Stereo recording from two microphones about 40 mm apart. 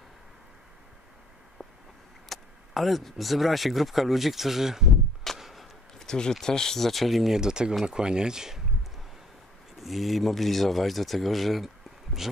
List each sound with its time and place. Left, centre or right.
2.2 s speech: centre
5.4 s a sound: centre
5.9 s a sound: centre
6.4 s speech: centre
7.3 s speech: centre
9.8 s speech: centre